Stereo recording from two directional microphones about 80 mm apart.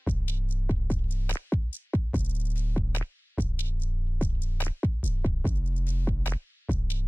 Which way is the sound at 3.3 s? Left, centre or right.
Left.